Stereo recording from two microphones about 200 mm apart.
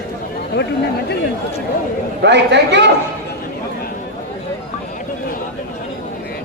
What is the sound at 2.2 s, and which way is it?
Speech, 60° right (ahead or behind).